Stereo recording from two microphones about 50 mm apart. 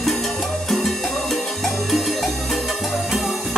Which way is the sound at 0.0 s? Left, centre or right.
Centre.